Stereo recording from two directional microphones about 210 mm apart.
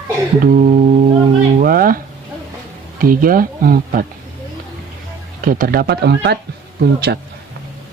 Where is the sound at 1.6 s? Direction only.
45° right (ahead or behind).